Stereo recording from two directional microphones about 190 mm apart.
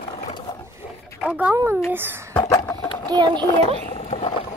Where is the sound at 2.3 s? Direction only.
15° left (ahead or behind).